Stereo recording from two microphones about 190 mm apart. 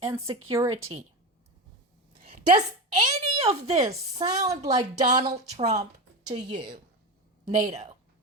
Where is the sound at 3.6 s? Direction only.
30° right (ahead or behind).